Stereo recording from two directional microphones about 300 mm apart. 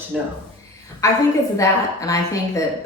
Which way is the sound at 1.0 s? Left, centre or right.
Centre.